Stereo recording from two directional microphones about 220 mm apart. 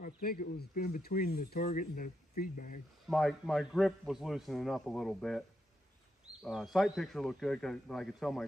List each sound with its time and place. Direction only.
0.0 s speech: 40° left (ahead or behind)
3.1 s a man's voice: centre (ahead or behind)
6.4 s a man's voice: centre (ahead or behind)